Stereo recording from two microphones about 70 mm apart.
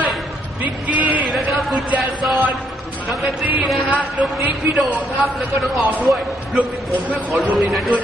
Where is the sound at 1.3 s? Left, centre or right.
Centre.